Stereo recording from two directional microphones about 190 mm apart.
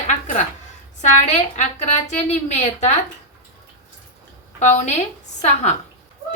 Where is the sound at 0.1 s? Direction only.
40° left (ahead or behind).